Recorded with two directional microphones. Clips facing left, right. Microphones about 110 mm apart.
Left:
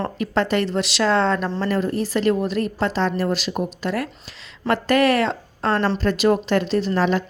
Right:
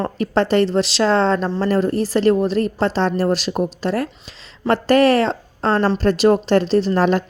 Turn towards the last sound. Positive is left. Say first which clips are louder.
# right 4 dB
turn(degrees=-45)  # may be behind; listen again after turning